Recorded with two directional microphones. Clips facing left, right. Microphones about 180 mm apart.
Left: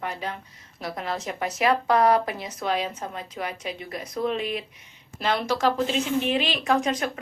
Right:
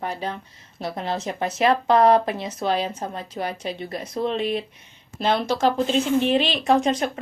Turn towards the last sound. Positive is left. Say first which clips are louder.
# right 4 dB
turn(degrees=-25)  # may be behind; listen again after turning